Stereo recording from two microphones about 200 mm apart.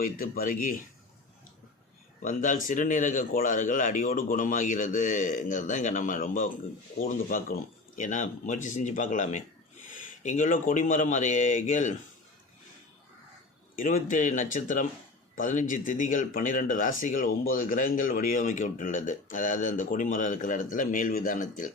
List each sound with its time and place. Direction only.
0.0 s speech: 45° left (ahead or behind)
2.2 s speech: 40° left (ahead or behind)
13.7 s speech: 45° left (ahead or behind)